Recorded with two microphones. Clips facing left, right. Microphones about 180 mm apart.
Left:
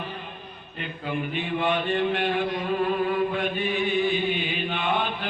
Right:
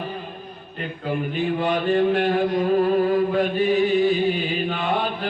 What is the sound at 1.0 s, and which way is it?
Mantra, 40° right (ahead or behind).